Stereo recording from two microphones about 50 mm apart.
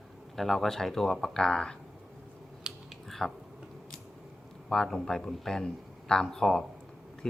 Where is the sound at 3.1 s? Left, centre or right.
Centre.